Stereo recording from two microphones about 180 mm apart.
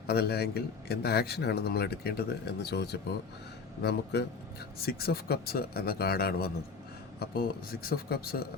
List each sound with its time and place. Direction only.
0.1 s a man's voice: 60° left (ahead or behind)